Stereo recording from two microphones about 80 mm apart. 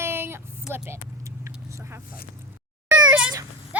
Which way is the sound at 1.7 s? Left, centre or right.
Right.